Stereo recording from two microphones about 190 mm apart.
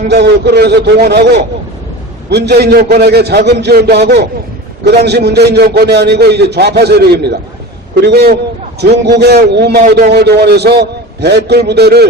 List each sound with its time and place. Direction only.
0.1 s a man's voice: 60° right (ahead or behind)